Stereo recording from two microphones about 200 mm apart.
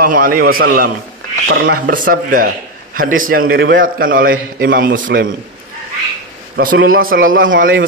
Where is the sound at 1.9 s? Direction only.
45° right (ahead or behind).